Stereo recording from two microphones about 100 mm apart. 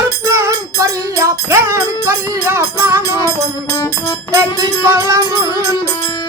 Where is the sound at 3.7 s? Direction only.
35° left (ahead or behind).